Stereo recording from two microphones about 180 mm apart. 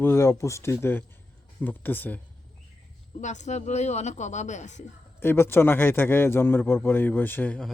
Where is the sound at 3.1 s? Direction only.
40° left (ahead or behind).